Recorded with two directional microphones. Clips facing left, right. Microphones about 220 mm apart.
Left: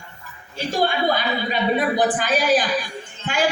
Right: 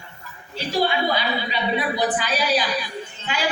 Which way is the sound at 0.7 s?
45° left (ahead or behind).